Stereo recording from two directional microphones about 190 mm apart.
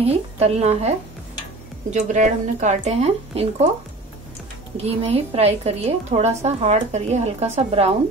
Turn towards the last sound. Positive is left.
turn(degrees=-35)  # may be behind; listen again after turning